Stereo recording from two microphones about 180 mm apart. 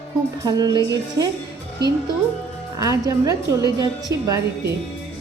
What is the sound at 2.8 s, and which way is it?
Speech, 20° right (ahead or behind).